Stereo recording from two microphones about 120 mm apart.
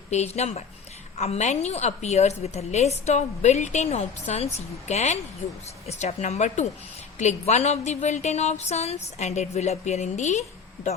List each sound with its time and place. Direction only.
0.1 s a woman's voice: 65° left (ahead or behind)